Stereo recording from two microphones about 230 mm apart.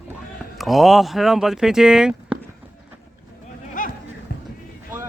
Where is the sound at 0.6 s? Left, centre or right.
Centre.